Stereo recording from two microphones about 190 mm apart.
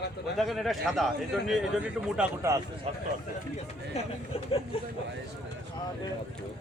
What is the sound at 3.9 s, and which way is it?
Speech, 30° left (ahead or behind).